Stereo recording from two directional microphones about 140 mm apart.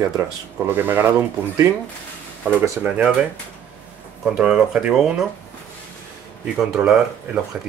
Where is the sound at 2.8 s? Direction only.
10° right (ahead or behind).